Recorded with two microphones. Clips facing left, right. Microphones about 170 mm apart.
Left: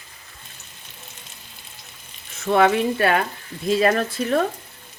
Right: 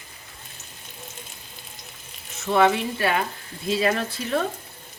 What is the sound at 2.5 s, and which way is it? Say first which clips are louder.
Speech: left 3 dB; 55° left (ahead or behind).